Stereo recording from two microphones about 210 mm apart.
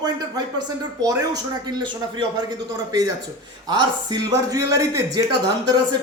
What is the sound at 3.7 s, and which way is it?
A man's voice, 20° right (ahead or behind).